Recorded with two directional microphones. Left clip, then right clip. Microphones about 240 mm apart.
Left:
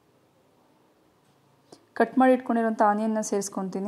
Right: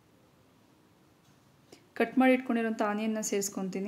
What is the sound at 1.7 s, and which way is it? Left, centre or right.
A woman's voice, centre.